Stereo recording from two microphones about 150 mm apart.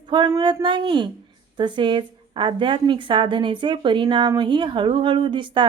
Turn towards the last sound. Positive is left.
turn(degrees=-30)  # may be behind; listen again after turning